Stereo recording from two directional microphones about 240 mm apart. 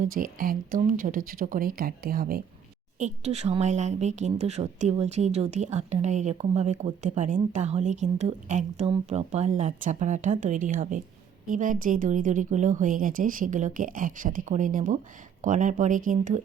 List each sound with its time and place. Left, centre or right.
0.0 s a woman's voice: right